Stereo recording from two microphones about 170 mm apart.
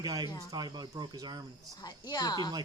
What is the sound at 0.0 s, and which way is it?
Speech, 25° right (ahead or behind).